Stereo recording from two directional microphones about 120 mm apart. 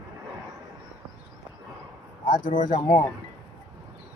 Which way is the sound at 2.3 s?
90° left.